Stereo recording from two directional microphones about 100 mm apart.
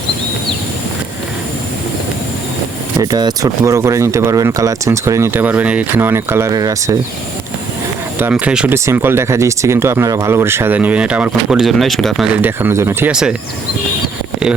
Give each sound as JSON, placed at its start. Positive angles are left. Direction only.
{"t": 3.0, "sound": "speech", "side_deg": -40}
{"t": 6.5, "sound": "speech", "side_deg": -35}
{"t": 8.3, "sound": "speech", "side_deg": -10}
{"t": 8.7, "sound": "speech", "side_deg": -25}
{"t": 12.4, "sound": "speech", "side_deg": -20}
{"t": 13.1, "sound": "speech", "side_deg": -5}